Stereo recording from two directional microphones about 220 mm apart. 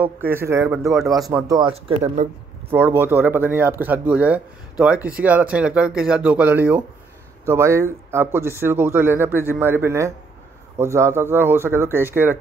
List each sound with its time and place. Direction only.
0.0 s speech: 10° right (ahead or behind)
0.9 s speech: centre (ahead or behind)
1.2 s speech: 15° right (ahead or behind)
1.9 s speech: 30° right (ahead or behind)
3.0 s speech: 10° right (ahead or behind)